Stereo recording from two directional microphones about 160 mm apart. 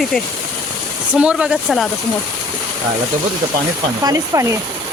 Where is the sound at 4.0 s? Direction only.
20° right (ahead or behind).